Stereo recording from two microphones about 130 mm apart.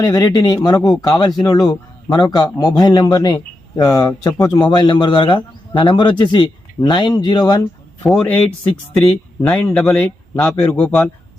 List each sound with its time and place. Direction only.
0.0 s speech: 30° left (ahead or behind)
8.0 s speech: 10° left (ahead or behind)